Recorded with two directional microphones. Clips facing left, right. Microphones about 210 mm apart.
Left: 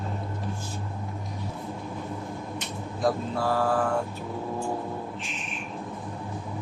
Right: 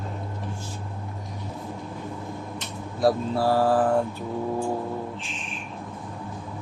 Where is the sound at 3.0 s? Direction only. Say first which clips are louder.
Right 4 dB; 35° right (ahead or behind).